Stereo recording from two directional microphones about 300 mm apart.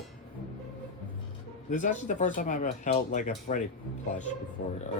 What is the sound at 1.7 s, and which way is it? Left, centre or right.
Speech, left.